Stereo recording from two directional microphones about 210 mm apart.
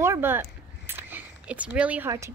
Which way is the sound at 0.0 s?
10° right (ahead or behind).